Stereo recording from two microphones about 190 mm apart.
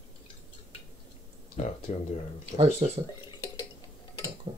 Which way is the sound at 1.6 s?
35° left (ahead or behind).